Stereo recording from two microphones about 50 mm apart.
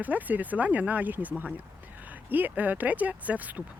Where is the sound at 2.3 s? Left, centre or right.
Right.